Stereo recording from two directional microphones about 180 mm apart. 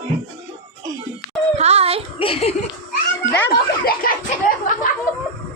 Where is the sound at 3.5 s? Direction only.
55° left (ahead or behind).